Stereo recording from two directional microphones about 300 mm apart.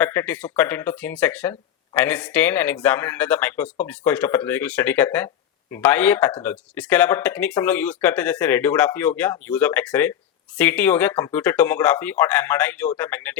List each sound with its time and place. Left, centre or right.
0.0 s speech: centre